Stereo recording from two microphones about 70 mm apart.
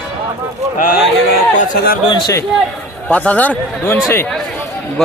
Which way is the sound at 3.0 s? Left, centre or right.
Centre.